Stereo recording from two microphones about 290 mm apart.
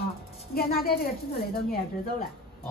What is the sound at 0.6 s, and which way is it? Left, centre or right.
Speech, left.